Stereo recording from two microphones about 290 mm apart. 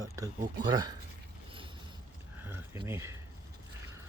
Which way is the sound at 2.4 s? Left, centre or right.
Centre.